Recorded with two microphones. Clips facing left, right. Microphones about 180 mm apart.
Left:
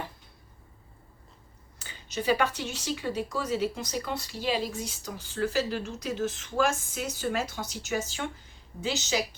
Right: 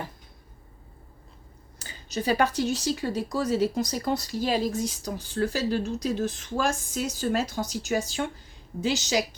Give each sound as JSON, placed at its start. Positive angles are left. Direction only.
{"t": 1.8, "sound": "speech", "side_deg": -40}